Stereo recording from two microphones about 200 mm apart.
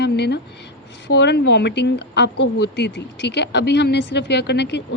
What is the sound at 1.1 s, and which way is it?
A woman's voice, 60° left (ahead or behind).